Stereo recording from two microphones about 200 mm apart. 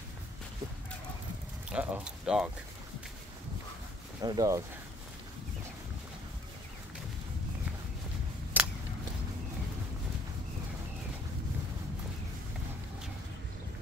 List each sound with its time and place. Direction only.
1.7 s speech: 5° right (ahead or behind)
4.2 s speech: 20° right (ahead or behind)
8.5 s a sound: 10° right (ahead or behind)